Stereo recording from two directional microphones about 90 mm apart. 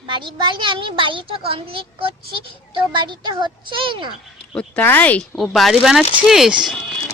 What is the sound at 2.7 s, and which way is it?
A child's voice, 60° right (ahead or behind).